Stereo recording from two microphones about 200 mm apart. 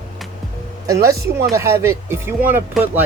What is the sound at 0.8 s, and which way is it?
Speech, 15° right (ahead or behind).